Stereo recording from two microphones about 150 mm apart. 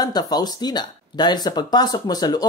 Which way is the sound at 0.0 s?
25° left (ahead or behind).